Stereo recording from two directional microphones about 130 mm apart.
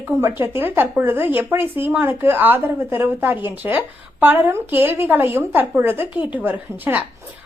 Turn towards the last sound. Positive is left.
turn(degrees=-15)  # may be behind; listen again after turning